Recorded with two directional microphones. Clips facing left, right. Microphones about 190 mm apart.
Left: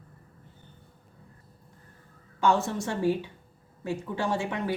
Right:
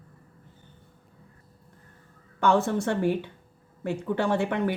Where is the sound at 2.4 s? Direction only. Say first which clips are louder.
Right 3 dB; 60° right (ahead or behind).